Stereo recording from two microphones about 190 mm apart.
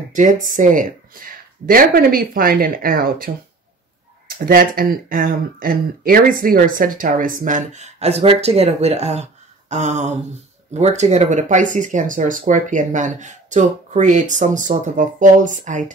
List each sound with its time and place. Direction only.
0.1 s speech: 40° right (ahead or behind)